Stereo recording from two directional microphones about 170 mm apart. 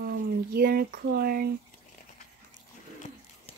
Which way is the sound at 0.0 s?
65° right (ahead or behind).